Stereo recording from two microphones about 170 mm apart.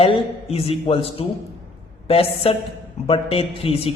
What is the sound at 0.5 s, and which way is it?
A woman's voice, 35° left (ahead or behind).